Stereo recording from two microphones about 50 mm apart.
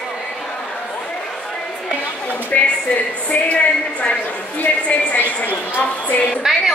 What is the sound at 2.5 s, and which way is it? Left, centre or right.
A woman's voice, left.